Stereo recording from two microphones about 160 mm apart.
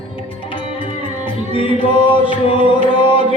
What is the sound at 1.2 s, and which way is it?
Music, 35° left (ahead or behind).